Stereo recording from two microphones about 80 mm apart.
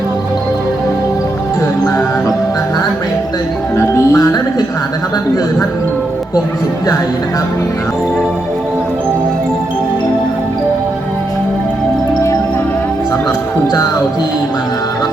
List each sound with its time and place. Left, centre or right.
3.8 s music: left